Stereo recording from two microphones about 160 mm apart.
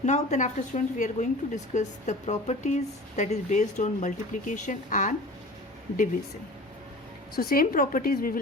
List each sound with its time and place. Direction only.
0.0 s a woman's voice: 45° left (ahead or behind)
7.3 s a woman's voice: 65° left (ahead or behind)